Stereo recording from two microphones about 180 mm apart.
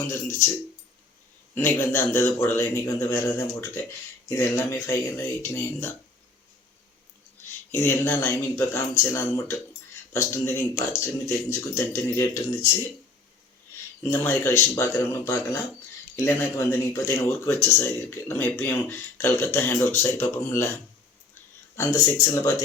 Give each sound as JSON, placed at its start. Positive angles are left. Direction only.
{"t": 0.1, "sound": "speech", "side_deg": 15}
{"t": 1.5, "sound": "speech", "side_deg": 15}
{"t": 7.7, "sound": "speech", "side_deg": 15}
{"t": 14.0, "sound": "speech", "side_deg": 15}
{"t": 21.8, "sound": "speech", "side_deg": 15}